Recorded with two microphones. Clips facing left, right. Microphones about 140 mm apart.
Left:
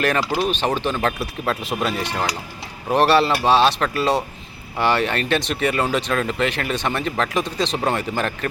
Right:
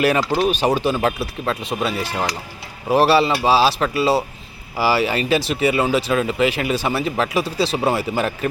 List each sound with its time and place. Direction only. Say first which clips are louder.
0.0 s speech: right 3 dB; 10° right (ahead or behind)